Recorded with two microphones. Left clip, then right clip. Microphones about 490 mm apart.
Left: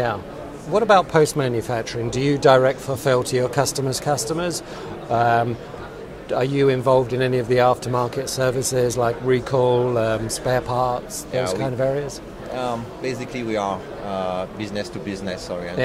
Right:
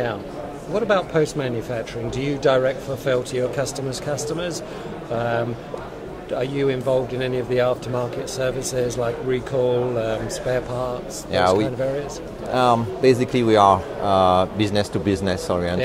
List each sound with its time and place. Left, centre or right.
0.7 s speech: left
12.5 s speech: right